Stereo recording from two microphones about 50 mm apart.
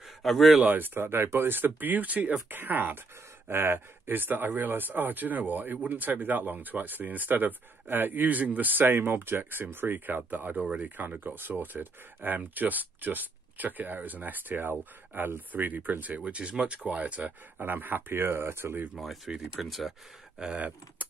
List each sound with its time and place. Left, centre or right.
0.0 s a sound: centre
0.6 s speech: right
1.0 s speech: right
16.3 s speech: right
18.9 s speech: centre
20.3 s speech: right